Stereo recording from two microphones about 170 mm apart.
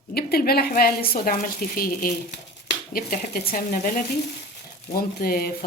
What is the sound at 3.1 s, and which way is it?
Speech, 55° left (ahead or behind).